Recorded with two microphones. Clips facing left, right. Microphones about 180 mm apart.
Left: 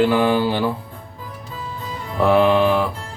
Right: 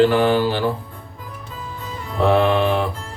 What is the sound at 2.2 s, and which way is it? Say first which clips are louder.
Music: left 1 dB; 5° left (ahead or behind).